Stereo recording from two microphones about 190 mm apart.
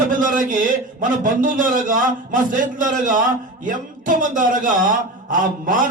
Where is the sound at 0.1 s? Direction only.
45° right (ahead or behind).